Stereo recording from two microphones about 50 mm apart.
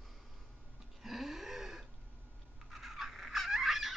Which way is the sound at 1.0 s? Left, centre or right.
Centre.